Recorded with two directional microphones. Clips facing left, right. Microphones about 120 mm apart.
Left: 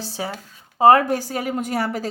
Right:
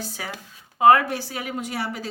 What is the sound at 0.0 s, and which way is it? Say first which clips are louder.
A woman's voice: left 5 dB; 30° left (ahead or behind).